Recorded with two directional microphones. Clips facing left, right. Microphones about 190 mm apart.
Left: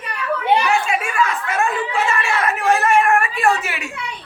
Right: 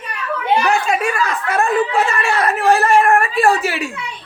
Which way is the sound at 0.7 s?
40° right (ahead or behind).